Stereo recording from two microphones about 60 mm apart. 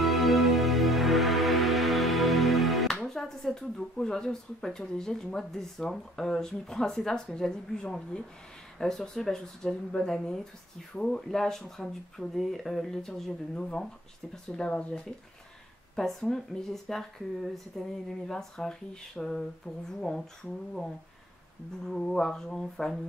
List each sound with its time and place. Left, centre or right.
0.0 s music: centre
8.7 s speech: centre
14.7 s speech: left
16.0 s speech: centre
21.8 s speech: centre